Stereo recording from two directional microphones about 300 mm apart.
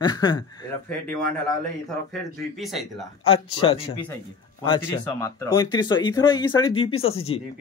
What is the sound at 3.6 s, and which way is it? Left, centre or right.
Speech, centre.